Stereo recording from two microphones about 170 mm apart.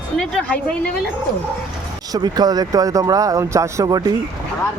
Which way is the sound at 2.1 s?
25° right (ahead or behind).